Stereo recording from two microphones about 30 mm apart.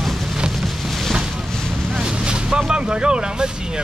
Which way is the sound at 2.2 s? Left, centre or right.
Right.